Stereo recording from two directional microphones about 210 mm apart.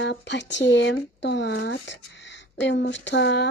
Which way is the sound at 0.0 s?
55° left (ahead or behind).